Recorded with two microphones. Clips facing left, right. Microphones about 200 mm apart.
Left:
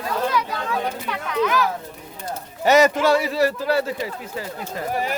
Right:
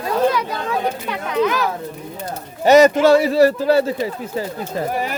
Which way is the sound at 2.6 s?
20° right (ahead or behind).